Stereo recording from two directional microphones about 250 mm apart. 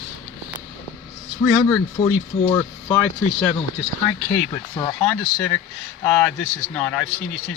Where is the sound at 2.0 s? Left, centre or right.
Centre.